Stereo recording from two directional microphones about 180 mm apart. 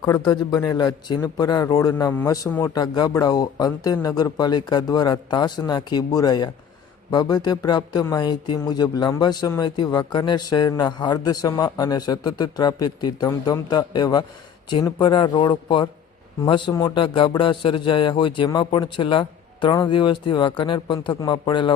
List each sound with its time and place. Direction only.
0.2 s speech: 20° left (ahead or behind)